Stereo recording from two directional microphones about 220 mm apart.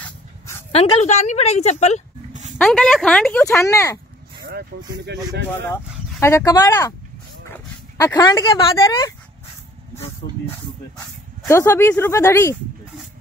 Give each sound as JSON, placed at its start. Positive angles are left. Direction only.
{"t": 0.0, "sound": "dog", "side_deg": 10}
{"t": 0.7, "sound": "a woman's voice", "side_deg": 25}
{"t": 2.6, "sound": "speech", "side_deg": 5}
{"t": 4.5, "sound": "speech", "side_deg": -50}
{"t": 5.6, "sound": "speech", "side_deg": 10}
{"t": 8.0, "sound": "speech", "side_deg": 15}
{"t": 11.4, "sound": "speech", "side_deg": 10}